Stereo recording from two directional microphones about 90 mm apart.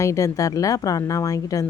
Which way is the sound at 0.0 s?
35° left (ahead or behind).